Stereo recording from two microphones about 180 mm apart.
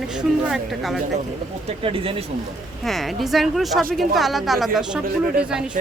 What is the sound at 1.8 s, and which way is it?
Speech, 30° right (ahead or behind).